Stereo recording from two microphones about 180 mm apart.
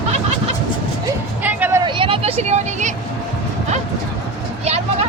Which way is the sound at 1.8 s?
30° right (ahead or behind).